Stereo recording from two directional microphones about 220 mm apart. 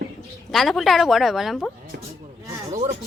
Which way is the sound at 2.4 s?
15° right (ahead or behind).